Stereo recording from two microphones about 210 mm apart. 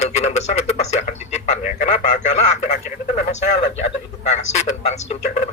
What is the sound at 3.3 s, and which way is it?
Speech, 35° left (ahead or behind).